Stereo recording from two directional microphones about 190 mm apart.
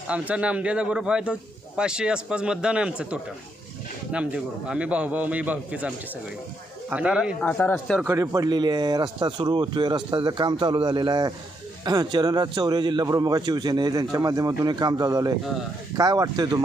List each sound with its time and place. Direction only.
0.1 s a man's voice: 5° right (ahead or behind)
6.9 s speech: 5° right (ahead or behind)
7.4 s speech: 10° left (ahead or behind)
7.9 s a man's voice: 10° right (ahead or behind)